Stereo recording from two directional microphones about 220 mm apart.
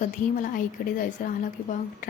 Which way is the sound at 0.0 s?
40° left (ahead or behind).